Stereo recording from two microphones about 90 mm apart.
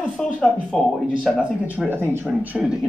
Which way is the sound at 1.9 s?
25° right (ahead or behind).